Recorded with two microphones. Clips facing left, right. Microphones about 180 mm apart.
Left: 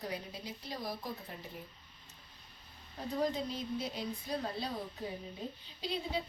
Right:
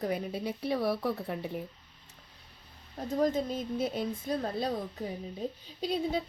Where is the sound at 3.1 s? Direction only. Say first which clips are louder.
Right 6 dB; 45° right (ahead or behind).